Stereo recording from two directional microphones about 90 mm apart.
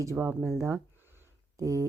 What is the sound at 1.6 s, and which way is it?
Speech, 35° right (ahead or behind).